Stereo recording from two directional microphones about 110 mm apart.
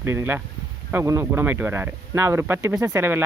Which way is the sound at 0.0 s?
20° right (ahead or behind).